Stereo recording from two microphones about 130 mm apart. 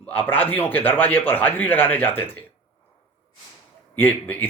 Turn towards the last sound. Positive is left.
turn(degrees=15)  # may be behind; listen again after turning